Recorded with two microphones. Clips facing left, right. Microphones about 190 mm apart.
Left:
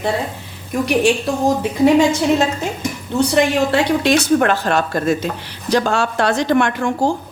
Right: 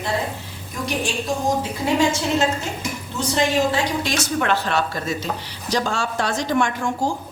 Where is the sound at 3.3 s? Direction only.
65° left (ahead or behind).